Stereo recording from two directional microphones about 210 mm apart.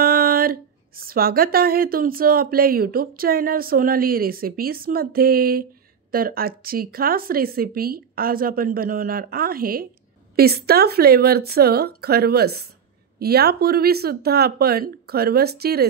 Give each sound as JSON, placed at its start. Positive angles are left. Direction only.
{"t": 0.0, "sound": "speech", "side_deg": -45}